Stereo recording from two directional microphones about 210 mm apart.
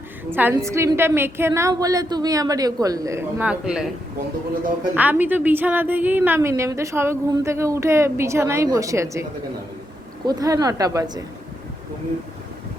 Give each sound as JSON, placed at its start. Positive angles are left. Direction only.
{"t": 0.3, "sound": "a woman's voice", "side_deg": -10}
{"t": 4.9, "sound": "a woman's voice", "side_deg": -10}
{"t": 10.2, "sound": "a woman's voice", "side_deg": -15}